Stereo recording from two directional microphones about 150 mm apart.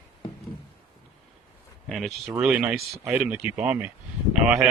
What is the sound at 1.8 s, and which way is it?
Speech, centre (ahead or behind).